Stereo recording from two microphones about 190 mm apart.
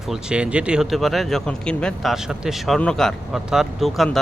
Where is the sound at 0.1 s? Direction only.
5° right (ahead or behind).